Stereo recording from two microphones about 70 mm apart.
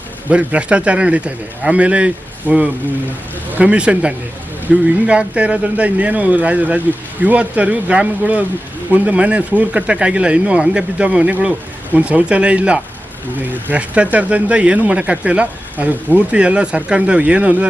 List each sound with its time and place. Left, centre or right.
0.3 s speech: centre